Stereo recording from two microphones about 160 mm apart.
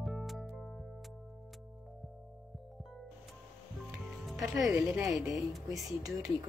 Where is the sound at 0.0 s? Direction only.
Centre (ahead or behind).